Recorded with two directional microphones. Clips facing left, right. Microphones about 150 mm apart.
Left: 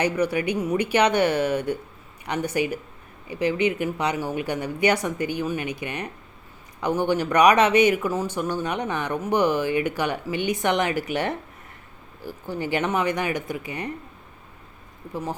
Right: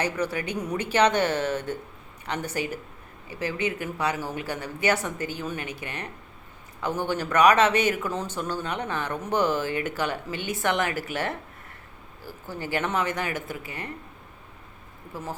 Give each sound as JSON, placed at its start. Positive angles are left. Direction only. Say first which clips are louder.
{"t": 0.0, "sound": "speech", "louder": "left 5 dB", "side_deg": 15}
{"t": 15.1, "sound": "speech", "louder": "left 5 dB", "side_deg": 15}